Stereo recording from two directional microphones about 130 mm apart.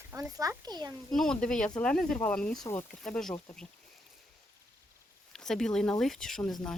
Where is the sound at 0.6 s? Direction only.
30° right (ahead or behind).